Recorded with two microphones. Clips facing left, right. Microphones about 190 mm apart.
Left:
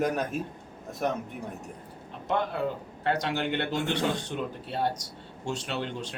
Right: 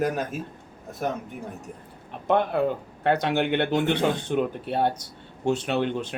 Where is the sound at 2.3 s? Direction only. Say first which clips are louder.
Right 6 dB; 60° right (ahead or behind).